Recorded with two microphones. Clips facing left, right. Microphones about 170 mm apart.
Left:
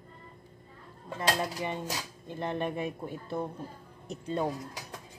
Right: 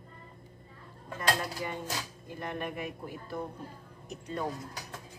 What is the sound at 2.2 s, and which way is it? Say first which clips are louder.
Speech: left 7 dB; 25° left (ahead or behind).